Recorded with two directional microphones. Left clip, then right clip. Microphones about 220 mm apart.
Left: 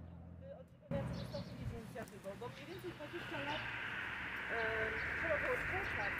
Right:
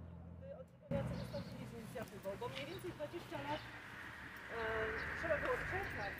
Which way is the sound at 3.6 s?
40° left (ahead or behind).